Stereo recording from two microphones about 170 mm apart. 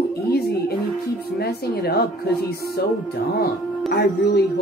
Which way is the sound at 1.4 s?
65° left (ahead or behind).